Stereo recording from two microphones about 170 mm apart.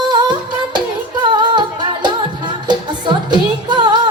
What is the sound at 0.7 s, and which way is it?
Music, 25° right (ahead or behind).